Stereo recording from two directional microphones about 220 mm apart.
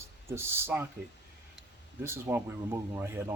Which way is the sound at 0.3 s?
10° right (ahead or behind).